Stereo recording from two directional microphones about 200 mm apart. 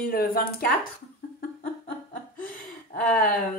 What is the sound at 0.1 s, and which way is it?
Speech, 50° left (ahead or behind).